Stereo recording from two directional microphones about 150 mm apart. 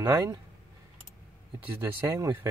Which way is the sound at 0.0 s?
20° right (ahead or behind).